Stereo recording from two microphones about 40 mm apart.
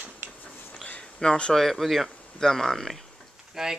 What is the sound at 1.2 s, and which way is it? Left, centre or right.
Speech, centre.